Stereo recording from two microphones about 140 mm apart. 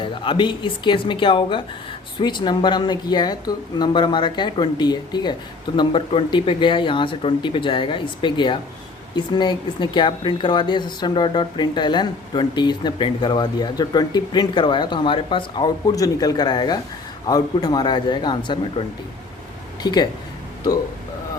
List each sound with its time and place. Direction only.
0.0 s speech: 35° left (ahead or behind)
19.8 s speech: 30° left (ahead or behind)